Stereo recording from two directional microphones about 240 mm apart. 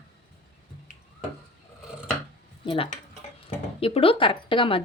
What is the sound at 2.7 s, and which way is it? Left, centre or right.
Speech, left.